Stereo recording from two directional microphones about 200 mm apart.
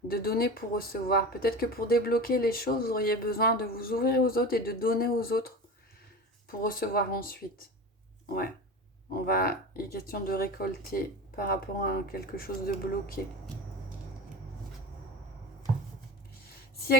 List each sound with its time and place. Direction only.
0.1 s speech: 50° left (ahead or behind)
6.6 s speech: 45° left (ahead or behind)
9.1 s speech: 50° left (ahead or behind)